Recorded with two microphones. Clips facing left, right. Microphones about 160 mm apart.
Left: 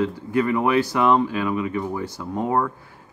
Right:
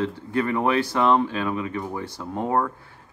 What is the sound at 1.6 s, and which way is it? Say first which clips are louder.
Speech: left 3 dB; 20° left (ahead or behind).